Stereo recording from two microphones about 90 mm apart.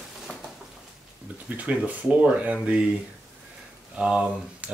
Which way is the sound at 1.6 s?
15° right (ahead or behind).